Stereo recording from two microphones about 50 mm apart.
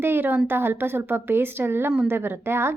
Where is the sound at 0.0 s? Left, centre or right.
Right.